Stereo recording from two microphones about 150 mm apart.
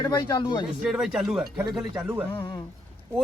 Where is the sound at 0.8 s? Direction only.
5° right (ahead or behind).